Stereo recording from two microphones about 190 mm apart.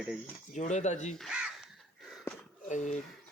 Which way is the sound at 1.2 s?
5° right (ahead or behind).